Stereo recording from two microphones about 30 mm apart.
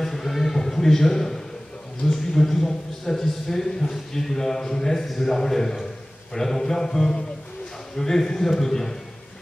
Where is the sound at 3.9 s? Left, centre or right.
Centre.